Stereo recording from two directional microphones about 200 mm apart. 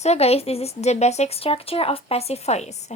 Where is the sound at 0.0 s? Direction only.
30° left (ahead or behind).